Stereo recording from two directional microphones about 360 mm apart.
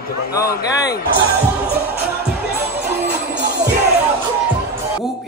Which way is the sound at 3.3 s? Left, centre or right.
Right.